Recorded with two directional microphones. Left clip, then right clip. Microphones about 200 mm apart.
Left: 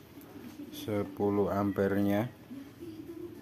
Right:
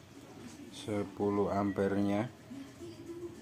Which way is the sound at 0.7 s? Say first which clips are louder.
Left 3 dB; 20° left (ahead or behind).